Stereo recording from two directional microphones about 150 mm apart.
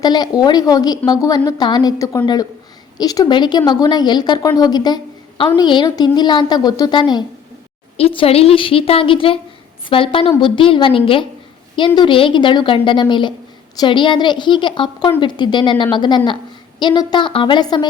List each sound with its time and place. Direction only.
0.0 s a woman's voice: 25° left (ahead or behind)